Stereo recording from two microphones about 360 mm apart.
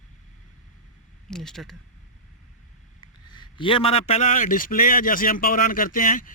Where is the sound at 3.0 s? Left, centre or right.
Centre.